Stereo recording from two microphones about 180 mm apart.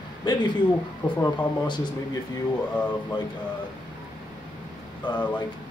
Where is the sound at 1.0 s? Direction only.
10° left (ahead or behind).